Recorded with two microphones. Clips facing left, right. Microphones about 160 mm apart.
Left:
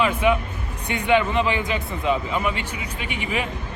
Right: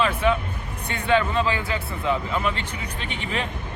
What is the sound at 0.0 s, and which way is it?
Speech, 15° left (ahead or behind).